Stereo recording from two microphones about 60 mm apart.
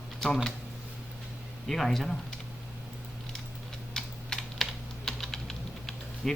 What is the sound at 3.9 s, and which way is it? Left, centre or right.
Typing, centre.